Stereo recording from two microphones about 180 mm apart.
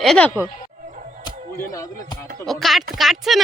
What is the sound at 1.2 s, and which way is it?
Music, 15° left (ahead or behind).